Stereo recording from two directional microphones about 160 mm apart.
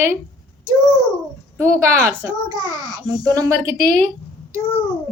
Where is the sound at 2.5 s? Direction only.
25° right (ahead or behind).